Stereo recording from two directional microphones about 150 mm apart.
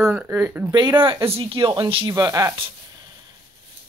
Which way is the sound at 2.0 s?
20° right (ahead or behind).